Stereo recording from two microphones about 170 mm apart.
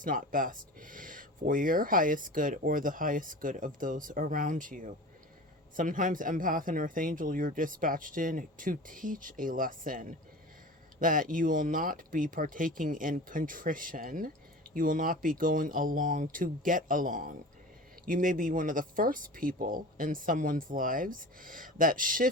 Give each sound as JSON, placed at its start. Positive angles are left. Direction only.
{"t": 0.0, "sound": "speech", "side_deg": -55}